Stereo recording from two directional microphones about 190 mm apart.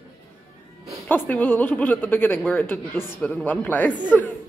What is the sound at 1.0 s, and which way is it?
Speech, 10° left (ahead or behind).